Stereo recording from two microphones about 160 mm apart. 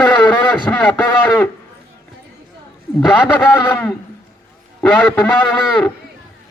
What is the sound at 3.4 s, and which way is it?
Goat, 10° left (ahead or behind).